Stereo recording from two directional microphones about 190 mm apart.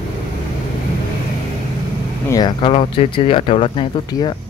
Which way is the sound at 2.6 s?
30° left (ahead or behind).